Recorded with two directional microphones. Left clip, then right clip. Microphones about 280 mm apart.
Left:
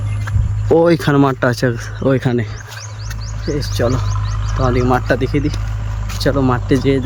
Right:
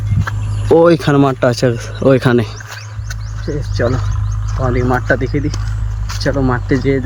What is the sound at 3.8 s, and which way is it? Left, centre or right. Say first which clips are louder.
A man's voice: right 3 dB; centre.